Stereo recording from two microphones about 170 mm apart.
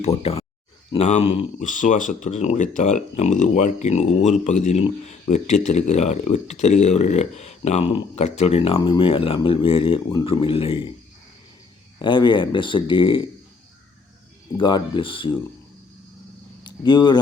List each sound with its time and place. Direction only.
0.0 s speech: 35° left (ahead or behind)
11.9 s speech: 25° left (ahead or behind)
14.6 s speech: 30° left (ahead or behind)
16.6 s speech: 25° left (ahead or behind)